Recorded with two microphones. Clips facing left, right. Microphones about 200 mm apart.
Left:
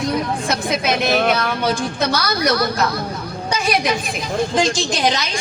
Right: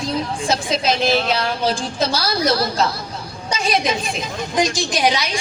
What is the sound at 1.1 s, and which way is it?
Speech, 60° left (ahead or behind).